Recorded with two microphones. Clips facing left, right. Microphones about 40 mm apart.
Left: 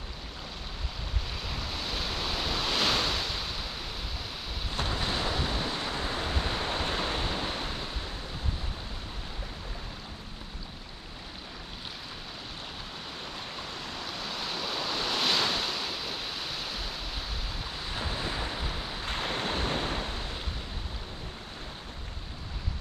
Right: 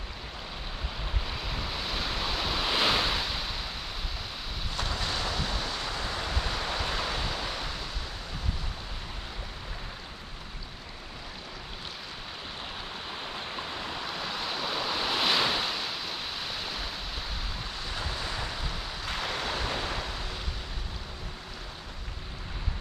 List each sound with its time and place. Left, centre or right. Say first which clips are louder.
1.2 s waves: right 1 dB; centre
4.8 s waves: left 1 dB; left
6.8 s pink noise: left 1 dB; left
13.1 s waves: right 3 dB; centre
18.1 s waves: left 1 dB; left
19.0 s wind: even; left